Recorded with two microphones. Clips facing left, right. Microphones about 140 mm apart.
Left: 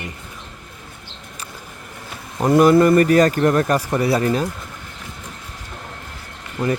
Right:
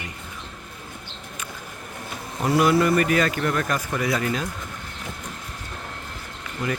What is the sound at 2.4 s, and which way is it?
Speech, 45° left (ahead or behind).